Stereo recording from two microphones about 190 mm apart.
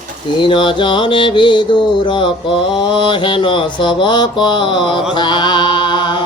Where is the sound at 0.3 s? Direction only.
25° left (ahead or behind).